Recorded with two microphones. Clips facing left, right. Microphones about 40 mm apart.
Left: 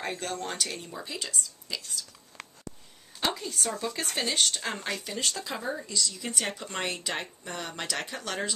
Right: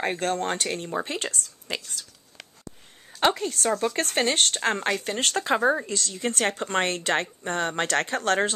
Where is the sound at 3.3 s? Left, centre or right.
Right.